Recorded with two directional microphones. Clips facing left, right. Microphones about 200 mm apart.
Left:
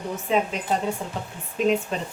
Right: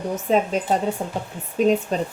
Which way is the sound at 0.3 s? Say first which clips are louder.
Right 4 dB; 40° right (ahead or behind).